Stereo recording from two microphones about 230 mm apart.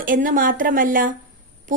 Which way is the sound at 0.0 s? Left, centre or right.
Right.